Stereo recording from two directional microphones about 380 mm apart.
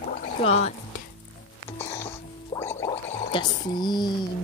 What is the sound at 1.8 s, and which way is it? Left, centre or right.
Music, centre.